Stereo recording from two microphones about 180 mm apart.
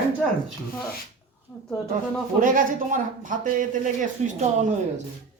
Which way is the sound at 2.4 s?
50° right (ahead or behind).